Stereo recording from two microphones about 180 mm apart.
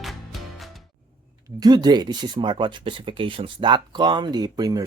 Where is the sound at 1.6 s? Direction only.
20° right (ahead or behind).